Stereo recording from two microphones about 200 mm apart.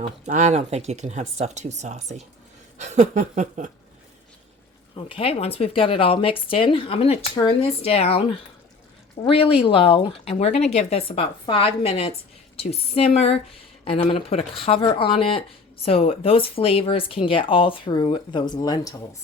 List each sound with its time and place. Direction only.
0.3 s speech: 35° right (ahead or behind)
4.9 s a woman's voice: 30° left (ahead or behind)